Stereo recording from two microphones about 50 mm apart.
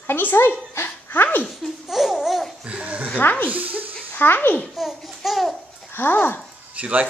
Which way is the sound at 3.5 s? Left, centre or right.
Right.